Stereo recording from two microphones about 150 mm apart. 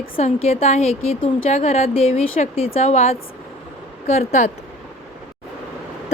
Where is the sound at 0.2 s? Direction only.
45° left (ahead or behind).